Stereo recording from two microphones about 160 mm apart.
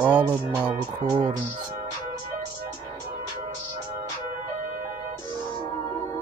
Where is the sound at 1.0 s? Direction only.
25° right (ahead or behind).